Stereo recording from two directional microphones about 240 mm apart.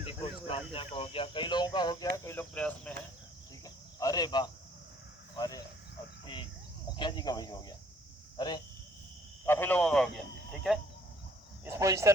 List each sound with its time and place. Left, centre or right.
0.1 s speech: left; by 2.9 s centre
3.6 s cricket: centre
5.4 s speech: centre
6.9 s speech: centre
11.6 s speech: centre